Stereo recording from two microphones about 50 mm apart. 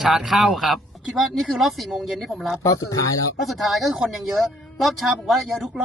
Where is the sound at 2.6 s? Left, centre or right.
Left.